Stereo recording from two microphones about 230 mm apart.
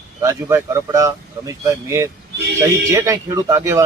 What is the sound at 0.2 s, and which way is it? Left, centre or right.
A man's voice, centre.